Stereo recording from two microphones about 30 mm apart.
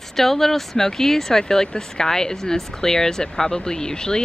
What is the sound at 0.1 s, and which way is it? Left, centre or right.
Speech, centre.